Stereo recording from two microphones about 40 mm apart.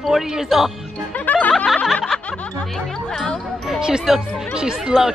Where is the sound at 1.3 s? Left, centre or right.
Left.